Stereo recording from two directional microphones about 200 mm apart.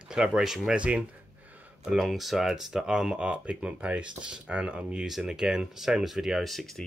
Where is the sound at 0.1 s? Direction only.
Centre (ahead or behind).